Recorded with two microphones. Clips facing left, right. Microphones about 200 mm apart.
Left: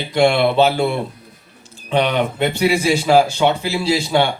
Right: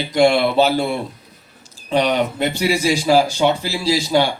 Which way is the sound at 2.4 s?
55° left (ahead or behind).